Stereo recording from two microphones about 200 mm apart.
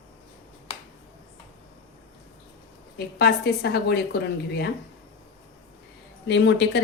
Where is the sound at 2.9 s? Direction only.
55° left (ahead or behind).